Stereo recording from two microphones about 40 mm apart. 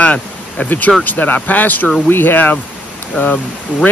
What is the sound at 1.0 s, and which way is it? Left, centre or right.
Speech, left.